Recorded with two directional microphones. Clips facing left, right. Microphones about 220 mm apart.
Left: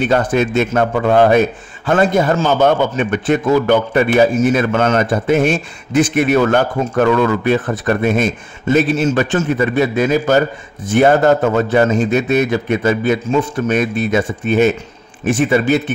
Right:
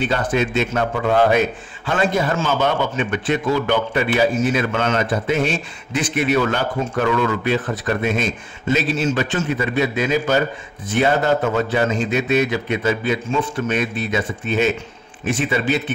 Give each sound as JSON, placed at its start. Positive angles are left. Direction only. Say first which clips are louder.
{"t": 0.1, "sound": "a man's voice", "louder": "left 5 dB", "side_deg": 45}